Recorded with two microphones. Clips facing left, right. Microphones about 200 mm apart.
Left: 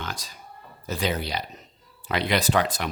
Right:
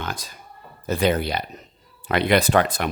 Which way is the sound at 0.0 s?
55° right (ahead or behind).